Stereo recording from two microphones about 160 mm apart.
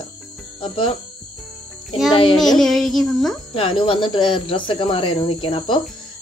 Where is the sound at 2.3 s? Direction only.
Centre (ahead or behind).